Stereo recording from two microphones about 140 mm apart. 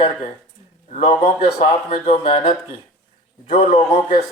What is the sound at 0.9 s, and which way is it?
Speech, 55° left (ahead or behind).